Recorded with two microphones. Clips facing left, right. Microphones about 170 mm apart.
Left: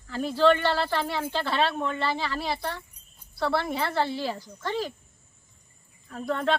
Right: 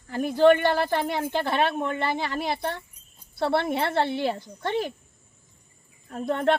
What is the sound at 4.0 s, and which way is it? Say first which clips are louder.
Speech: right 1 dB; 60° right (ahead or behind).